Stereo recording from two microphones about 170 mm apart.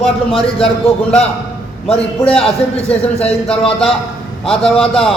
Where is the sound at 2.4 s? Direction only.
35° left (ahead or behind).